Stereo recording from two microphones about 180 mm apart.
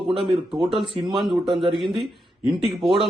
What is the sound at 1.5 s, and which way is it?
Speech, 25° right (ahead or behind).